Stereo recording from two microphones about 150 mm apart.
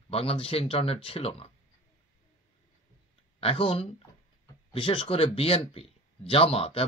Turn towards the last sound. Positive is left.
turn(degrees=40)  # may be behind; listen again after turning